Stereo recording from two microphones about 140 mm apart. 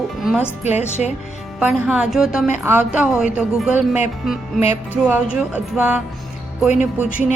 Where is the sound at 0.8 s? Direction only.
55° left (ahead or behind).